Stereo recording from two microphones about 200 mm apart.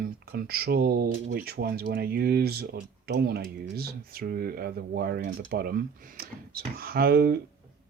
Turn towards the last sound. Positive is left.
turn(degrees=-50)  # may be behind; listen again after turning